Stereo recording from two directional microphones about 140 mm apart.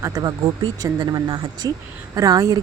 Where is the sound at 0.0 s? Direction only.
25° right (ahead or behind).